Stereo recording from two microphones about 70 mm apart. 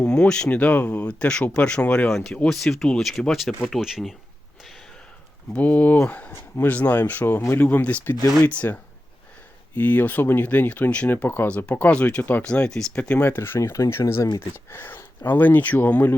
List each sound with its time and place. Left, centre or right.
0.0 s speech: centre
0.6 s speech: left
2.0 s speech: centre
5.5 s speech: left
11.4 s speech: centre; by 13.6 s left
13.6 s speech: left
14.3 s speech: left